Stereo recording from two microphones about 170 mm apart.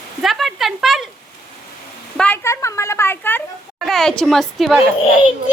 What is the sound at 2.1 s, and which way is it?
A woman's voice, 10° left (ahead or behind).